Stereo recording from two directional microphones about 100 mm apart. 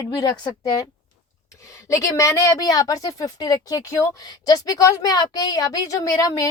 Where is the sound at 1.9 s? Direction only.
35° left (ahead or behind).